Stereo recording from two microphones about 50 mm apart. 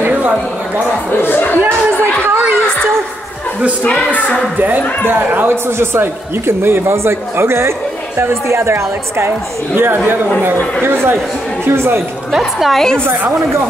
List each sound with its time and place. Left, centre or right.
1.2 s speech: left
2.2 s a sound: right
3.8 s speech: left
5.0 s speech: right
9.8 s speech: right
12.3 s a woman's voice: centre
12.7 s a woman's voice: centre